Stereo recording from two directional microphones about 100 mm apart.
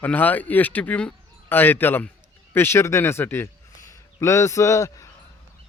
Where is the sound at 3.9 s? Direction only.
30° left (ahead or behind).